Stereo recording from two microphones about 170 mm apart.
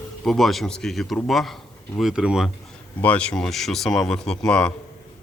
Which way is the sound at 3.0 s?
10° left (ahead or behind).